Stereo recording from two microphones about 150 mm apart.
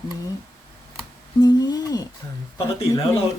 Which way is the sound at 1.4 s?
25° left (ahead or behind).